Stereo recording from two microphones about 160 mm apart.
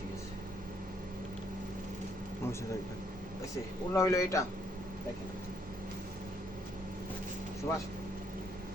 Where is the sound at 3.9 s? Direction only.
20° left (ahead or behind).